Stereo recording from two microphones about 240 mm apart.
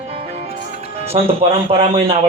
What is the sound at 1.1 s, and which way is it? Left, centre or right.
Speech, right.